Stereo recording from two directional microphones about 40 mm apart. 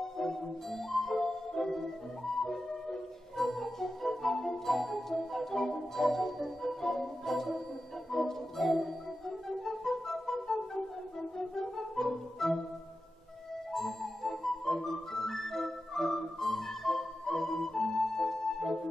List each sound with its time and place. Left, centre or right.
0.2 s music: centre
9.5 s flute: centre
12.4 s music: centre
13.7 s music: centre